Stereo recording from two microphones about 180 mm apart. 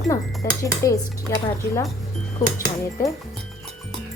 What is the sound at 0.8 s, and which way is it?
Speech, 20° left (ahead or behind).